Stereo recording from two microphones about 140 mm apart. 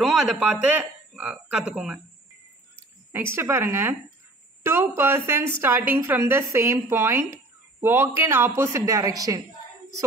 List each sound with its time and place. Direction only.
0.0 s speech: 5° right (ahead or behind)
3.1 s a woman's voice: 15° right (ahead or behind)